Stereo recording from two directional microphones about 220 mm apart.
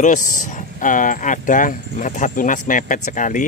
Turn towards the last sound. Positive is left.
turn(degrees=35)  # may be behind; listen again after turning